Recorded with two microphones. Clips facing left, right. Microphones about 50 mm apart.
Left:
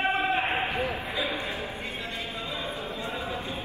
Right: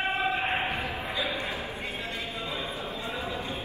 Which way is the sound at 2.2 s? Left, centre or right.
Left.